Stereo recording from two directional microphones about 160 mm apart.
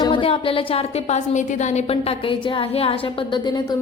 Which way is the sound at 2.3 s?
35° left (ahead or behind).